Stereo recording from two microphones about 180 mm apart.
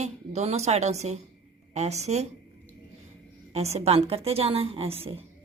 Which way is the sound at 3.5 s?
35° right (ahead or behind).